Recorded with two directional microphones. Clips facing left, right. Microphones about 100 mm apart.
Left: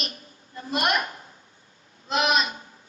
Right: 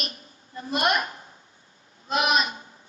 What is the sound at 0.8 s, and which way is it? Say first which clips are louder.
Speech: right 1 dB; 25° right (ahead or behind).